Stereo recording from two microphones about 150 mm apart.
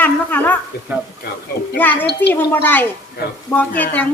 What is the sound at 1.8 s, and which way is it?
Speech, 10° left (ahead or behind).